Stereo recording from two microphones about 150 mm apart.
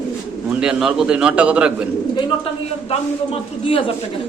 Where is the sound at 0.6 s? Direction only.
5° right (ahead or behind).